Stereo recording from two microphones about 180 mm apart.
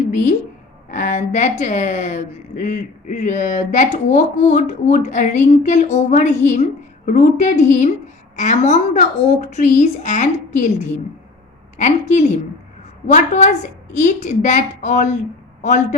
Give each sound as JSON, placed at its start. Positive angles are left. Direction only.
{"t": 0.1, "sound": "a woman's voice", "side_deg": 40}